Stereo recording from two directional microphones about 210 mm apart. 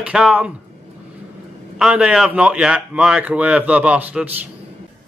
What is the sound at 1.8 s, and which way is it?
Speech, 5° right (ahead or behind).